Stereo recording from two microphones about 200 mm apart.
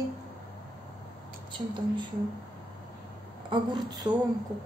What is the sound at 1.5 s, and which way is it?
Speech, 25° right (ahead or behind).